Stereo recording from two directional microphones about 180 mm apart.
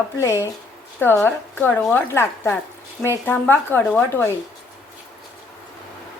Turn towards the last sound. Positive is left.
turn(degrees=10)  # may be behind; listen again after turning